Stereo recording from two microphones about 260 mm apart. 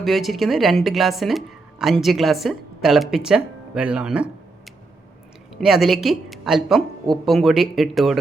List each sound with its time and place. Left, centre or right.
0.0 s speech: centre
5.5 s speech: centre